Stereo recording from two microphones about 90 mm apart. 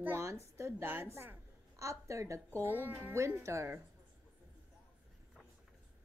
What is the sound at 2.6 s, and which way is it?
A woman's voice, 20° right (ahead or behind).